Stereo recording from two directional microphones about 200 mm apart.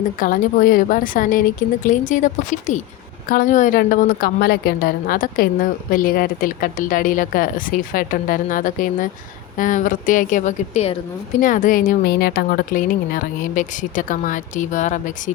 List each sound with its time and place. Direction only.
0.2 s a woman's voice: 45° left (ahead or behind)